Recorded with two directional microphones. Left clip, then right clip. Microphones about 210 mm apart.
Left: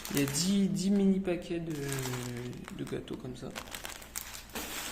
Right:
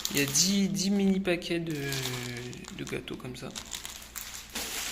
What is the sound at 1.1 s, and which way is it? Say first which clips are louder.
Speech: right 4 dB; 10° right (ahead or behind).